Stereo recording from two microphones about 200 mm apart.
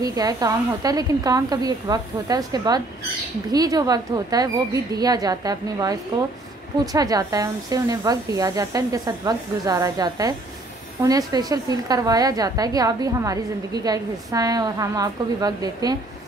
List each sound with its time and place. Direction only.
0.0 s a woman's voice: 20° right (ahead or behind)